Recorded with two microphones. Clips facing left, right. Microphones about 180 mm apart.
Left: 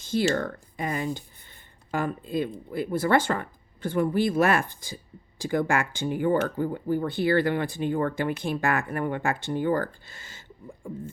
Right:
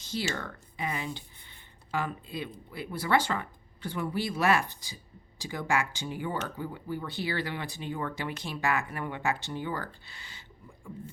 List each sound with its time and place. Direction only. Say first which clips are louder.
0.0 s speech: left 9 dB; 50° left (ahead or behind)